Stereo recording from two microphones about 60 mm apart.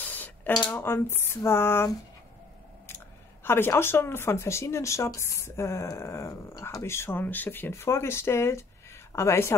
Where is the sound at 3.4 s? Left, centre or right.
Left.